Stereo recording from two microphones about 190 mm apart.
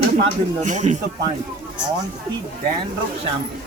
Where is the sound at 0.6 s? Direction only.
40° right (ahead or behind).